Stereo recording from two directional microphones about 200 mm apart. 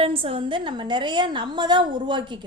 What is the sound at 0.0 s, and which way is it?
A woman's voice, 25° right (ahead or behind).